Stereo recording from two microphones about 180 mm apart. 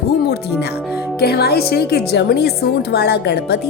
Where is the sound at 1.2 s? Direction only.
60° left (ahead or behind).